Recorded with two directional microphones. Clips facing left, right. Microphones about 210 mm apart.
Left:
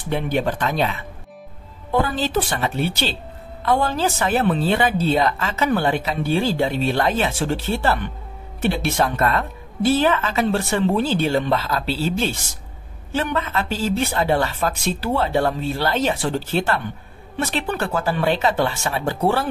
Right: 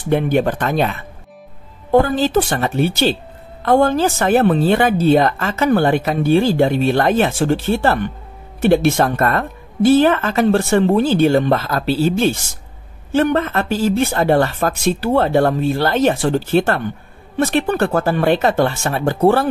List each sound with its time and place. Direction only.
0.1 s a woman's voice: 50° right (ahead or behind)